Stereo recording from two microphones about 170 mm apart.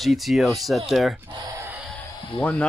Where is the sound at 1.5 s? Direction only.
15° right (ahead or behind).